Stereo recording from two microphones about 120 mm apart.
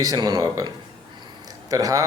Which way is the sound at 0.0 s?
35° right (ahead or behind).